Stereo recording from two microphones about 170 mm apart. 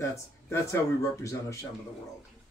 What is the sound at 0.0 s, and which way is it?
Speech, 15° left (ahead or behind).